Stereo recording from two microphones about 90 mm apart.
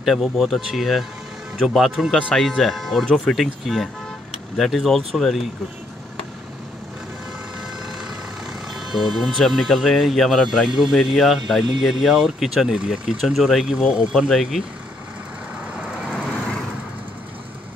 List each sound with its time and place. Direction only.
0.0 s speech: centre (ahead or behind)
8.7 s speech: 5° right (ahead or behind)